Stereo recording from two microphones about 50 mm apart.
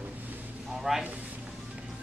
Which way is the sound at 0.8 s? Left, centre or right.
Centre.